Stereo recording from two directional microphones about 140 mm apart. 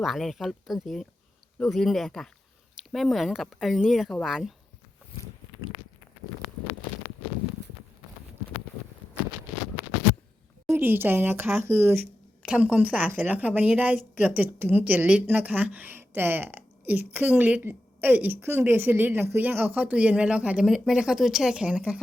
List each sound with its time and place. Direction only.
0.0 s speech: centre (ahead or behind)
10.7 s a woman's voice: 15° right (ahead or behind)